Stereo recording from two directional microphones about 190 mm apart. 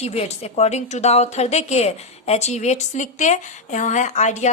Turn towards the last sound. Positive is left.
turn(degrees=40)  # may be behind; listen again after turning